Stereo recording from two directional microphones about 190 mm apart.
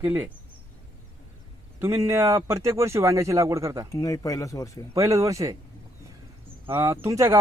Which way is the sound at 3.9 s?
15° left (ahead or behind).